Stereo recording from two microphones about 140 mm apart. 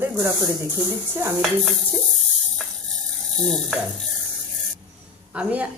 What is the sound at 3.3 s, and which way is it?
Speech, 5° left (ahead or behind).